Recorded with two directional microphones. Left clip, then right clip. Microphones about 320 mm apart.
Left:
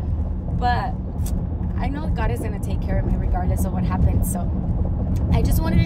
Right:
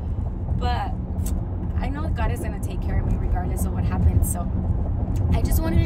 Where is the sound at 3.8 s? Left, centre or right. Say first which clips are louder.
Left 3 dB; centre.